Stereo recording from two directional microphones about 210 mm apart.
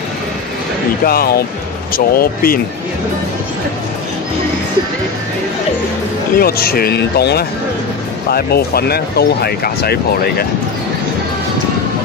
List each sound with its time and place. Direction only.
1.0 s speech: 45° left (ahead or behind)
6.3 s speech: 45° left (ahead or behind)